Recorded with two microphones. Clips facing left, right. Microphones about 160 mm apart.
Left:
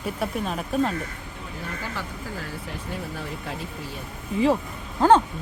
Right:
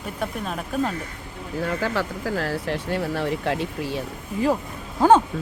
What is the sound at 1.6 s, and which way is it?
Speech, 90° right.